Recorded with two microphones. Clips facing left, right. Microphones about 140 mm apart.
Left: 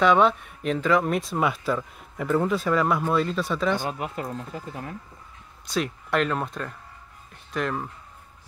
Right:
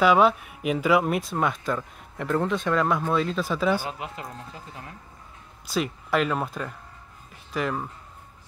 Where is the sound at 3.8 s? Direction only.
50° left (ahead or behind).